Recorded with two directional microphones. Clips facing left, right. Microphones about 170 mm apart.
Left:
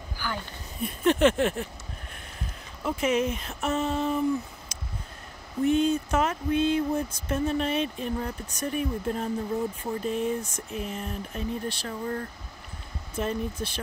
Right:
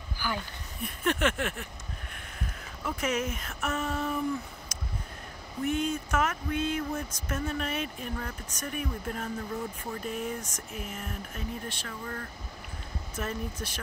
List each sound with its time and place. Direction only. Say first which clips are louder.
0.8 s speech: left 7 dB; 25° left (ahead or behind)
2.8 s speech: left 5 dB; 25° left (ahead or behind)
5.7 s mantra: left 6 dB; 30° left (ahead or behind)
7.2 s speech: left 6 dB; 30° left (ahead or behind)